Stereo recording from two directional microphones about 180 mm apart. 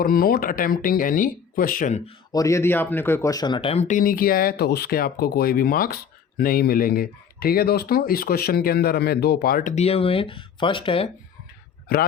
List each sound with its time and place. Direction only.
0.0 s speech: 55° left (ahead or behind)
2.3 s speech: 15° left (ahead or behind)